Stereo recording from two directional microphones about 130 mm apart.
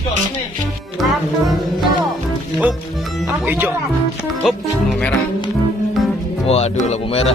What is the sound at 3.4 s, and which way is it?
Music, 15° right (ahead or behind).